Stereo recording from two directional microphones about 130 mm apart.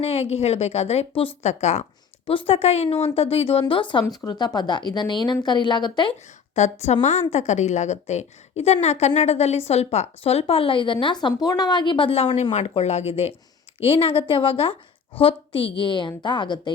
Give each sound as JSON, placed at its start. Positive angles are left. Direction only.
{"t": 0.0, "sound": "a woman's voice", "side_deg": 50}
{"t": 1.4, "sound": "a woman's voice", "side_deg": 60}
{"t": 2.2, "sound": "a woman's voice", "side_deg": 45}
{"t": 4.0, "sound": "a woman's voice", "side_deg": 25}
{"t": 6.5, "sound": "a woman's voice", "side_deg": 55}